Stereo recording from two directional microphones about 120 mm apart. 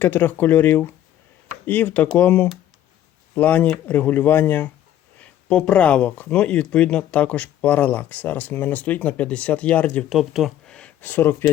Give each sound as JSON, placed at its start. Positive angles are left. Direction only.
{"t": 0.0, "sound": "speech", "side_deg": 15}
{"t": 10.1, "sound": "speech", "side_deg": 0}
{"t": 10.8, "sound": "speech", "side_deg": 10}